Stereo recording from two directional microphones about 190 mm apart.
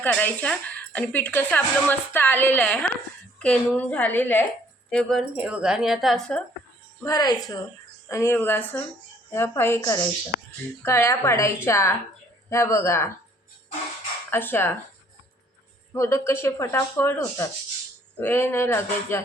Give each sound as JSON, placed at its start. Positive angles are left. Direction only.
{"t": 0.0, "sound": "a woman's voice", "side_deg": 10}
{"t": 7.0, "sound": "a woman's voice", "side_deg": 20}
{"t": 14.3, "sound": "a woman's voice", "side_deg": 10}
{"t": 15.9, "sound": "a woman's voice", "side_deg": 15}